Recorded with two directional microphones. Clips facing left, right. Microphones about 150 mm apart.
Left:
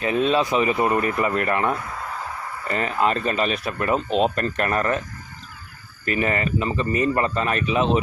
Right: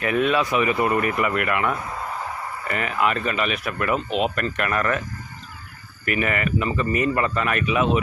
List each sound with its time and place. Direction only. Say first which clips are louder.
0.0 s speech: left 1 dB; 25° left (ahead or behind)
6.1 s speech: left 1 dB; 30° left (ahead or behind)